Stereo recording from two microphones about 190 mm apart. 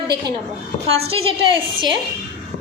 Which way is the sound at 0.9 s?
30° right (ahead or behind).